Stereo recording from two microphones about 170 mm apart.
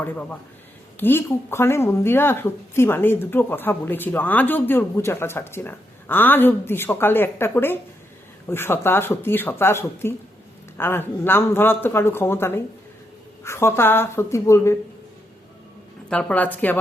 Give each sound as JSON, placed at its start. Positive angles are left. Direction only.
{"t": 0.0, "sound": "speech", "side_deg": 10}
{"t": 16.0, "sound": "speech", "side_deg": 10}